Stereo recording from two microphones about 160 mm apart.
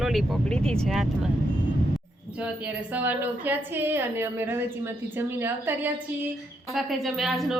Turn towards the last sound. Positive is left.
turn(degrees=0)  # may be behind; listen again after turning